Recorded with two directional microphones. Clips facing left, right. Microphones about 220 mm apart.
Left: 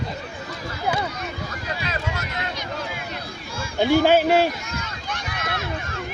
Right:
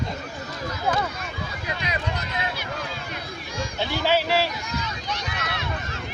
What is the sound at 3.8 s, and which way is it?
Speech, 50° left (ahead or behind).